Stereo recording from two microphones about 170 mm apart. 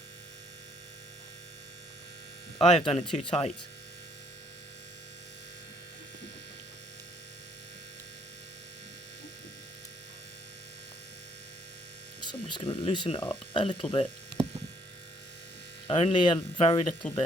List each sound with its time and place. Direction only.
2.6 s speech: 35° left (ahead or behind)
12.3 s speech: 25° left (ahead or behind)
15.9 s speech: 30° left (ahead or behind)
17.0 s speech: 5° left (ahead or behind)